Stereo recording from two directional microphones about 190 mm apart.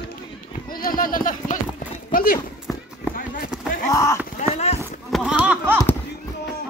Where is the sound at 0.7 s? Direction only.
50° left (ahead or behind).